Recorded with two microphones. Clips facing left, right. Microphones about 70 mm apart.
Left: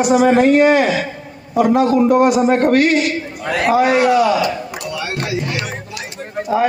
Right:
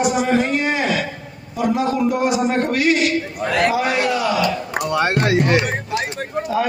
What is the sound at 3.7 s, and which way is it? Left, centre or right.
Speech, left.